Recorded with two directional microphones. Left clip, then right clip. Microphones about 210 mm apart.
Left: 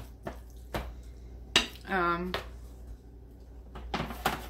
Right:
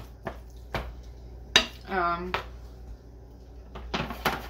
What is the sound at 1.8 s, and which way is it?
Dishes, 40° left (ahead or behind).